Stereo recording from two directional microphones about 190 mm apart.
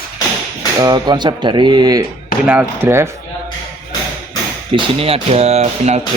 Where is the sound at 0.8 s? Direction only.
20° right (ahead or behind).